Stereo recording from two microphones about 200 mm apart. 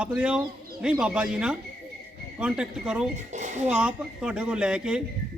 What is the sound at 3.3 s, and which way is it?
Speech, 35° right (ahead or behind).